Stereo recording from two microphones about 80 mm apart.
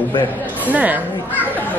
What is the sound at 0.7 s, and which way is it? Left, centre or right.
Speech, centre.